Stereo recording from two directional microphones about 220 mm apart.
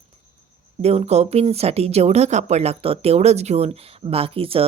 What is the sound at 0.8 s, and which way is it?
Speech, 30° right (ahead or behind).